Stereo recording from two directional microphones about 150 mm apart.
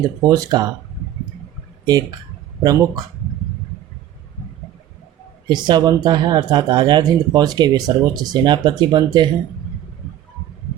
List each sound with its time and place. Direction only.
0.2 s speech: 25° right (ahead or behind)
1.9 s speech: 25° right (ahead or behind)
5.5 s speech: 30° right (ahead or behind)